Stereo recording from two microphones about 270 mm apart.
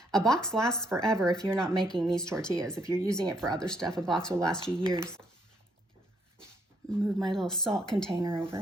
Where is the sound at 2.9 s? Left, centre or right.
Centre.